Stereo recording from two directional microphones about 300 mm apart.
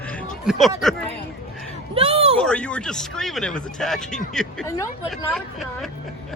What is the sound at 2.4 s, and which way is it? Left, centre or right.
Speech, centre.